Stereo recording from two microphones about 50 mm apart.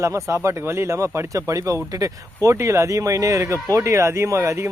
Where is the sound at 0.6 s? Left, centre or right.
Right.